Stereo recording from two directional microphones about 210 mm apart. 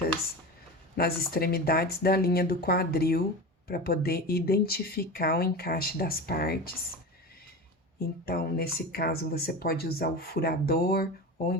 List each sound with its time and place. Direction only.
0.9 s speech: 45° left (ahead or behind)
8.2 s speech: 45° left (ahead or behind)